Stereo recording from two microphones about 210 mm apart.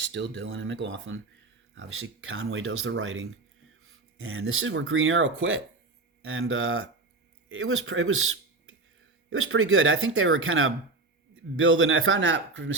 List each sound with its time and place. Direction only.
0.0 s speech: 55° right (ahead or behind)
1.7 s speech: 75° right (ahead or behind)